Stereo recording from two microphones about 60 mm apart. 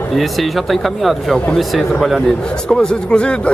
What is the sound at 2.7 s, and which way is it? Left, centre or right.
Speech, centre.